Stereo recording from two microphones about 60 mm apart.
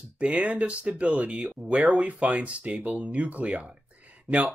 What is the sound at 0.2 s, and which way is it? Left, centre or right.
Speech, right.